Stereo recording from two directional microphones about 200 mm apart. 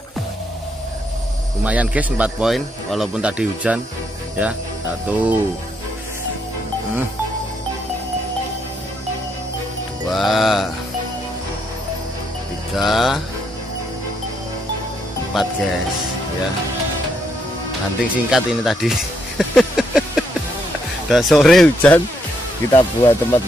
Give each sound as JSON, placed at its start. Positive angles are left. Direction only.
{"t": 1.6, "sound": "a man's voice", "side_deg": -5}
{"t": 5.1, "sound": "a man's voice", "side_deg": -5}
{"t": 10.1, "sound": "speech", "side_deg": 0}
{"t": 12.7, "sound": "speech", "side_deg": 0}
{"t": 15.3, "sound": "speech", "side_deg": 0}
{"t": 18.1, "sound": "a sound", "side_deg": 0}
{"t": 21.1, "sound": "speech", "side_deg": 0}
{"t": 22.7, "sound": "speech", "side_deg": 20}